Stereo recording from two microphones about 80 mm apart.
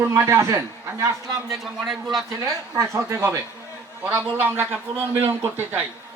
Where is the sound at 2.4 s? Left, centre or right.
Right.